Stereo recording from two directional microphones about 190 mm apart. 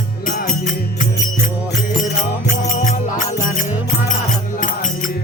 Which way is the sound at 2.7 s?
40° left (ahead or behind).